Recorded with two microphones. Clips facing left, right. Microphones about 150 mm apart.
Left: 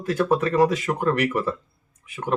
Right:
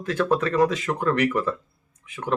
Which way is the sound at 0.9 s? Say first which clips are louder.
Left 1 dB; 20° left (ahead or behind).